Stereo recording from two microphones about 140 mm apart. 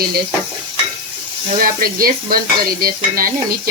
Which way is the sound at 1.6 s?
90° right.